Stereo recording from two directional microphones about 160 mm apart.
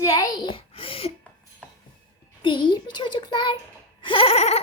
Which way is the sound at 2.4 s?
30° left (ahead or behind).